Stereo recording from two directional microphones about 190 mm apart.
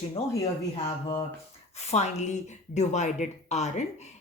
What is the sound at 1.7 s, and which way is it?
Speech, 35° left (ahead or behind).